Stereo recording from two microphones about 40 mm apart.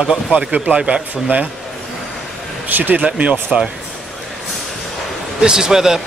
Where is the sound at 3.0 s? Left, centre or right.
Right.